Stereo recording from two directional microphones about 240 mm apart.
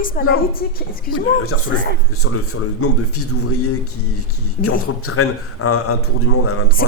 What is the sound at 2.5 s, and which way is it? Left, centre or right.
Speech, left.